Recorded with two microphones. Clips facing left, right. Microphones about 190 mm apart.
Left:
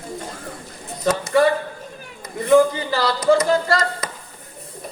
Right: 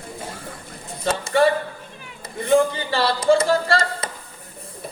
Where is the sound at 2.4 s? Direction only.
30° right (ahead or behind).